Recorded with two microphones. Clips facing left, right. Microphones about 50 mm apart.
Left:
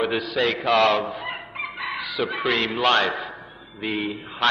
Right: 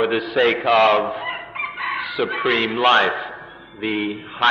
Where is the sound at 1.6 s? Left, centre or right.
Right.